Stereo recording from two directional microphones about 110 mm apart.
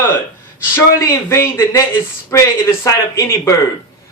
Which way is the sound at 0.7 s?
25° left (ahead or behind).